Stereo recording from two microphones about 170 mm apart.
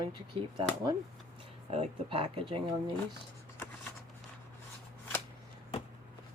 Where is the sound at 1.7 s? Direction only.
35° right (ahead or behind).